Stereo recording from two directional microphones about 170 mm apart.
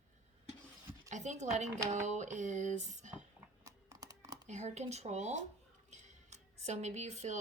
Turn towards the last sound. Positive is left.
turn(degrees=-40)  # may be behind; listen again after turning